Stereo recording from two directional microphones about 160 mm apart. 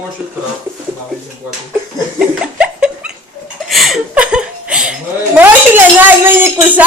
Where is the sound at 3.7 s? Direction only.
Centre (ahead or behind).